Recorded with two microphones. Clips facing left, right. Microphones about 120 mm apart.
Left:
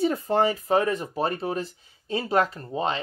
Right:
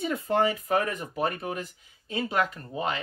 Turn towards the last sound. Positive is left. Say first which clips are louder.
# left 3 dB
turn(degrees=30)  # may be behind; listen again after turning